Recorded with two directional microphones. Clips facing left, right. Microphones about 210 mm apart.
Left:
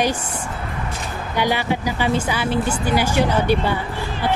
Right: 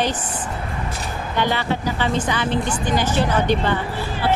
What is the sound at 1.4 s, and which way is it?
Speech, 10° left (ahead or behind).